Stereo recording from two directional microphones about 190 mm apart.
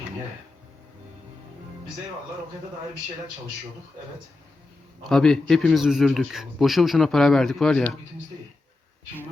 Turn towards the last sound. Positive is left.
turn(degrees=5)  # may be behind; listen again after turning